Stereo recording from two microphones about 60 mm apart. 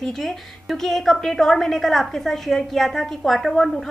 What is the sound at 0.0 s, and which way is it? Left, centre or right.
A woman's voice, centre.